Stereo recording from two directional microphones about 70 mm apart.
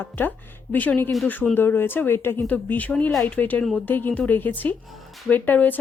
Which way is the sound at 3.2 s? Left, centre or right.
Left.